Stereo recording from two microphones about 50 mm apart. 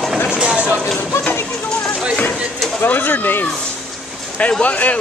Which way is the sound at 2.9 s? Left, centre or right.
Left.